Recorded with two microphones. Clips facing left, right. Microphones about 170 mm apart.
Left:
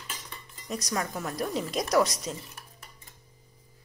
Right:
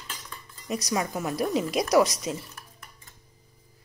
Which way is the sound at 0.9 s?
10° right (ahead or behind).